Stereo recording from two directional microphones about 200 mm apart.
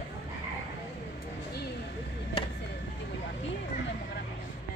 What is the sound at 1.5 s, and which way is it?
Vehicle, 55° left (ahead or behind).